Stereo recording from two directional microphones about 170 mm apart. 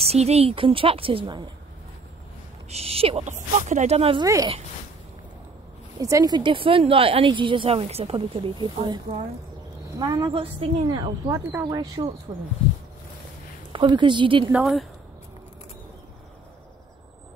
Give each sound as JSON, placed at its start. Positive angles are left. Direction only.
{"t": 0.0, "sound": "a woman's voice", "side_deg": -40}
{"t": 2.7, "sound": "a woman's voice", "side_deg": -35}
{"t": 5.9, "sound": "a woman's voice", "side_deg": -20}
{"t": 11.2, "sound": "a woman's voice", "side_deg": -20}
{"t": 13.7, "sound": "a woman's voice", "side_deg": -30}
{"t": 14.5, "sound": "speech", "side_deg": 0}